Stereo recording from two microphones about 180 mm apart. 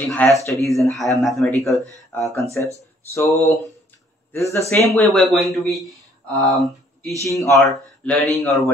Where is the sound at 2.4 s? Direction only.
15° right (ahead or behind).